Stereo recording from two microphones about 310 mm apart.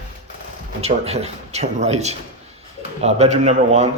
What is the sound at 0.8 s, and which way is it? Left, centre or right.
A man's voice, centre.